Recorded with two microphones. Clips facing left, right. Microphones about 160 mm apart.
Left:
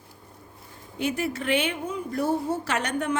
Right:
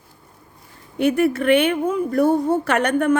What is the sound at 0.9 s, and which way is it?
Speech, 60° right (ahead or behind).